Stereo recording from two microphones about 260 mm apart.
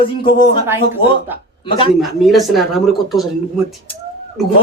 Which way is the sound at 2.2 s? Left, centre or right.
Centre.